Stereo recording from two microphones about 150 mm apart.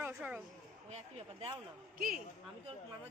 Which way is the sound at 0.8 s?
45° right (ahead or behind).